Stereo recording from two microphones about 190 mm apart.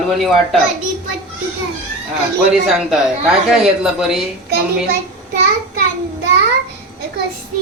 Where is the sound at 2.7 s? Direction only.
Centre (ahead or behind).